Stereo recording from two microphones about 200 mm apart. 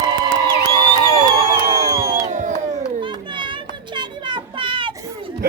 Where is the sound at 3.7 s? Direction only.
25° right (ahead or behind).